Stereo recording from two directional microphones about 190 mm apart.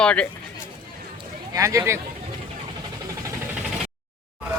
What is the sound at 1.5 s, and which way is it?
Speech, 15° right (ahead or behind).